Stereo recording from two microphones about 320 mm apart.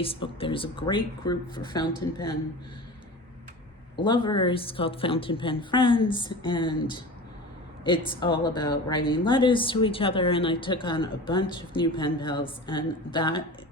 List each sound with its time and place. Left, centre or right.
0.0 s a woman's voice: centre
4.0 s a woman's voice: centre